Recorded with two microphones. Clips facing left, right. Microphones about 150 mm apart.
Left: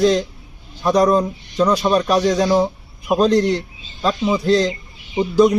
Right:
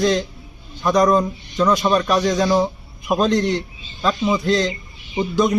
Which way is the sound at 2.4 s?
15° left (ahead or behind).